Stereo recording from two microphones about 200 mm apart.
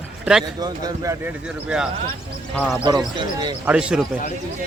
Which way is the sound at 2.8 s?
20° right (ahead or behind).